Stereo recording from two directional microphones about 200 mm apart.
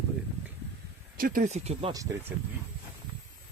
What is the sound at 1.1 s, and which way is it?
Speech, 45° right (ahead or behind).